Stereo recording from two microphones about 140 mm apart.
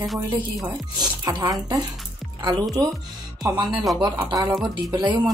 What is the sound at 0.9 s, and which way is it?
Speech, 30° right (ahead or behind).